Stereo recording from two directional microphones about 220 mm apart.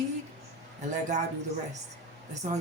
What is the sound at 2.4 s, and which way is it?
Speech, 35° right (ahead or behind).